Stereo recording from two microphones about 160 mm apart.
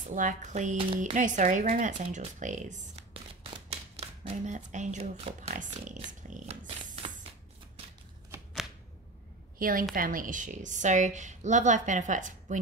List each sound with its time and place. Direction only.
0.1 s a woman's voice: 55° right (ahead or behind)
0.7 s speech: 35° right (ahead or behind)
1.1 s a woman's voice: 50° right (ahead or behind)
3.1 s a sound: 40° right (ahead or behind)
5.5 s speech: 50° right (ahead or behind)
9.6 s a woman's voice: 65° right (ahead or behind)